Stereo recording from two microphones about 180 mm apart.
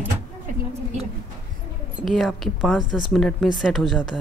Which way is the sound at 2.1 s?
Centre (ahead or behind).